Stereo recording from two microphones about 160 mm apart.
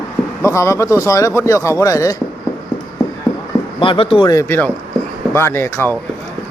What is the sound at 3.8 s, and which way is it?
Speech, 35° left (ahead or behind).